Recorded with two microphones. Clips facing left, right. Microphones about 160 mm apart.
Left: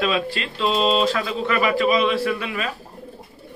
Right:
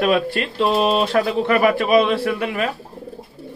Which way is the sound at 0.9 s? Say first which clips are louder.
Right 3 dB; 60° right (ahead or behind).